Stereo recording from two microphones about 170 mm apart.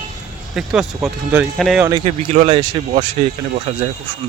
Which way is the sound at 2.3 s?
55° right (ahead or behind).